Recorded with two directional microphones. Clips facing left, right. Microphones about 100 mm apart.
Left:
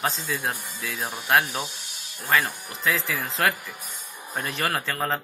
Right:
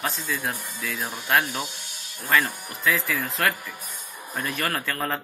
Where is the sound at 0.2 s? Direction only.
25° left (ahead or behind).